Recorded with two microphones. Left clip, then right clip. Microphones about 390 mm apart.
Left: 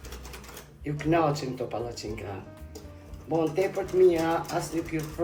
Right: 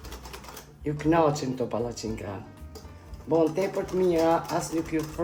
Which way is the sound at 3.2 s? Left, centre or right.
Right.